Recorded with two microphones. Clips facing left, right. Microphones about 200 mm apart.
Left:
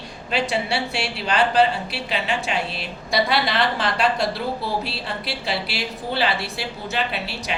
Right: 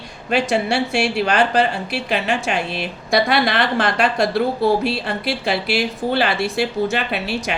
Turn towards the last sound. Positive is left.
turn(degrees=-50)  # may be behind; listen again after turning